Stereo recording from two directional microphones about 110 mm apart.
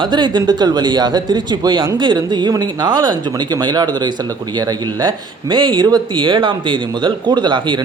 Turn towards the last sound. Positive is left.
turn(degrees=-45)  # may be behind; listen again after turning